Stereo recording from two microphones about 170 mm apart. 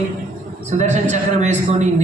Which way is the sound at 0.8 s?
45° right (ahead or behind).